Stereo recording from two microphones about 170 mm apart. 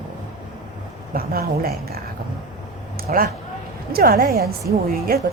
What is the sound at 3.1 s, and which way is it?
Speech, 55° right (ahead or behind).